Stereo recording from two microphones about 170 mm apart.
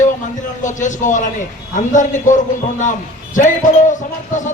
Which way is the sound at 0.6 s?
45° left (ahead or behind).